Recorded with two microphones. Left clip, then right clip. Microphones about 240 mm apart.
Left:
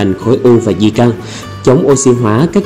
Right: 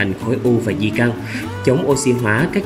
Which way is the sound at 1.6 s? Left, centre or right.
Centre.